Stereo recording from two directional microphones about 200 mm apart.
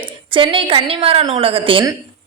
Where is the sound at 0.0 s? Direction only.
25° right (ahead or behind).